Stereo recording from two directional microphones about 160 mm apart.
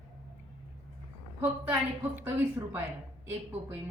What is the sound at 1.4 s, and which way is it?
Speech, 15° right (ahead or behind).